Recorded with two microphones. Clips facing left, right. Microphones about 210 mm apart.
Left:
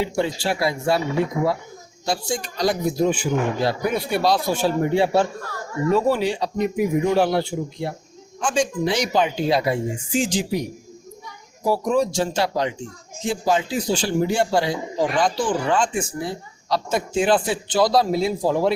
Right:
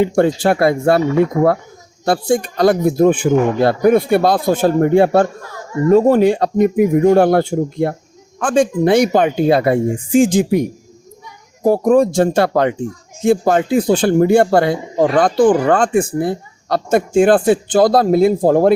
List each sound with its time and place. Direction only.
0.0 s speech: 50° right (ahead or behind)